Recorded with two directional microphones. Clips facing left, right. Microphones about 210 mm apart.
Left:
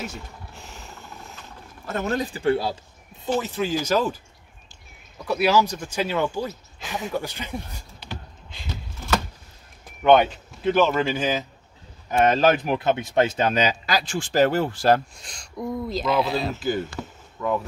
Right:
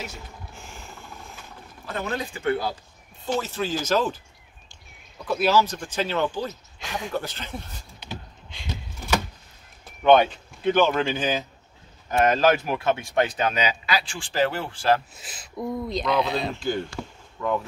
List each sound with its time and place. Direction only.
0.1 s a sound: centre (ahead or behind)
1.9 s speech: 40° left (ahead or behind)
3.3 s speech: 15° left (ahead or behind)
5.2 s speech: 10° left (ahead or behind)
8.0 s a sound: centre (ahead or behind)
10.0 s speech: 5° left (ahead or behind)
12.6 s speech: 20° left (ahead or behind); by 15.0 s 40° left (ahead or behind)
15.1 s speech: 5° right (ahead or behind)